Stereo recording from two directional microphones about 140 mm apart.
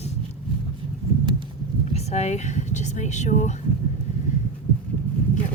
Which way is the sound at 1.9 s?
50° left (ahead or behind).